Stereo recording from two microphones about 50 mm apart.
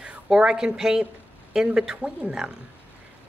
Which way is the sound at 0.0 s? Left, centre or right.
Centre.